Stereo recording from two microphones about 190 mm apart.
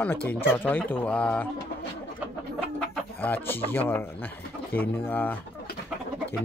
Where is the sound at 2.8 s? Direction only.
10° left (ahead or behind).